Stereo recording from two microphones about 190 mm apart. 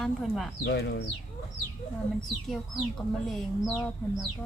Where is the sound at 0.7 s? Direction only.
60° left (ahead or behind).